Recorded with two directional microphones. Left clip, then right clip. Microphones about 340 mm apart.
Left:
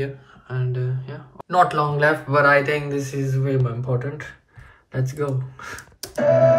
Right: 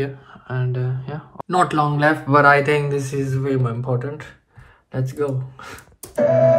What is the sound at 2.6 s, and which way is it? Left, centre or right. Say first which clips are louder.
Speech: right 3 dB; centre.